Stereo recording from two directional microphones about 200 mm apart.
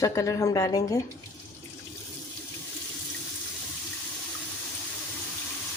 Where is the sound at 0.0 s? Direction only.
15° left (ahead or behind).